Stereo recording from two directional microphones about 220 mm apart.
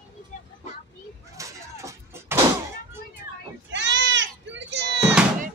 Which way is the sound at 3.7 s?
55° right (ahead or behind).